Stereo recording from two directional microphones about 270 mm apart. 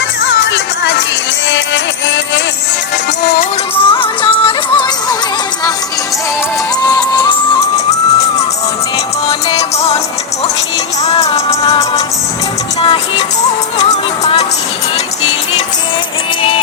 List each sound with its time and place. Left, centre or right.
3.8 s music: centre
7.9 s music: left
9.6 s music: left
11.2 s music: centre
13.7 s music: left